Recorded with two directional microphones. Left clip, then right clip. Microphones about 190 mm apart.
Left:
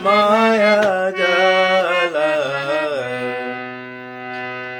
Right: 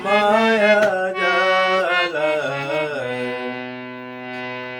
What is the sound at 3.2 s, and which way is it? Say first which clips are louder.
Music: left 2 dB; 15° left (ahead or behind).